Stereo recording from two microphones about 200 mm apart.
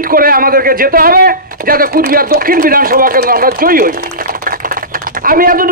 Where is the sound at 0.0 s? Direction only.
45° right (ahead or behind).